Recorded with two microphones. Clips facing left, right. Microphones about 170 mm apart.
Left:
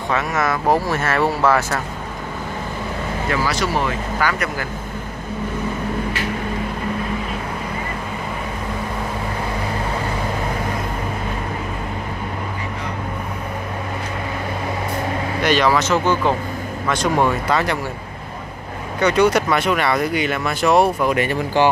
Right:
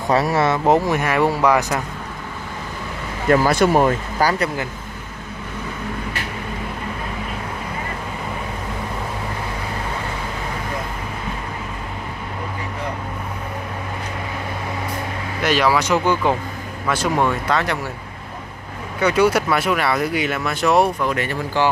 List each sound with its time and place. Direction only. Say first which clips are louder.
0.1 s speech: right 4 dB; 35° right (ahead or behind); by 1.8 s 15° right (ahead or behind)
3.3 s speech: right 8 dB; 50° right (ahead or behind); by 4.5 s 35° right (ahead or behind)
15.4 s speech: left 1 dB; 5° right (ahead or behind)
18.9 s speech: left 1 dB; 5° right (ahead or behind)
21.0 s speech: left 3 dB; 15° left (ahead or behind)